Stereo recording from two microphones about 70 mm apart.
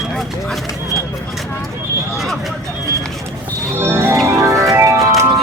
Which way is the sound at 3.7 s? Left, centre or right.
Right.